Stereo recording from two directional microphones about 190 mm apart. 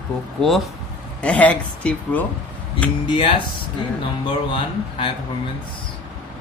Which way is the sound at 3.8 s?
25° left (ahead or behind).